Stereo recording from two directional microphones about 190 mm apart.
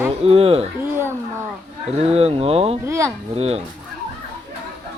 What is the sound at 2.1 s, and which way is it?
Speech, 30° right (ahead or behind).